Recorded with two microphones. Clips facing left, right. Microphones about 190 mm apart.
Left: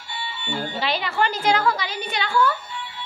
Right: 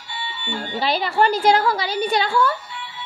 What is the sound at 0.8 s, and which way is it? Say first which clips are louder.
A woman's voice: right 6 dB; 35° right (ahead or behind).